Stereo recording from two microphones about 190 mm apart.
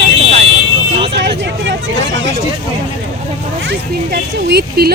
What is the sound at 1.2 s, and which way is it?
Speech, 65° right (ahead or behind).